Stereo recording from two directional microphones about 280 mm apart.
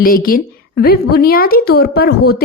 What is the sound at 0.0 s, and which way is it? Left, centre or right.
A woman's voice, left.